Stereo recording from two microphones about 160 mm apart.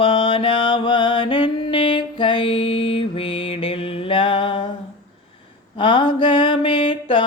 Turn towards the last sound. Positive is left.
turn(degrees=30)  # may be behind; listen again after turning